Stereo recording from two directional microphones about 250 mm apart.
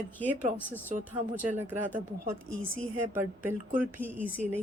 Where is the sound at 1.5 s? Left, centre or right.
Centre.